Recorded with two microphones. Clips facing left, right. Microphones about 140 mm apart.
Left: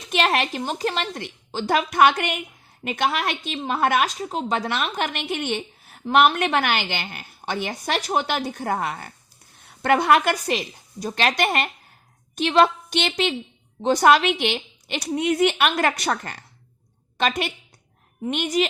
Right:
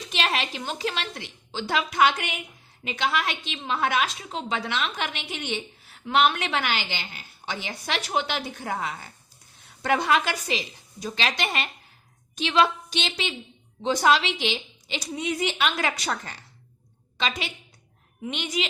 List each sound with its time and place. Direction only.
0.1 s a woman's voice: 50° left (ahead or behind)